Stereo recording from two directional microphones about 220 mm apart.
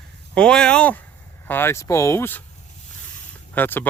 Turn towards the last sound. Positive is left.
turn(degrees=10)  # may be behind; listen again after turning